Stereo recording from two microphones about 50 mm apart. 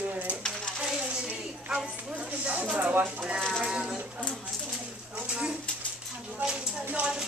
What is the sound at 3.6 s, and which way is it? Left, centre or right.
Speech, centre.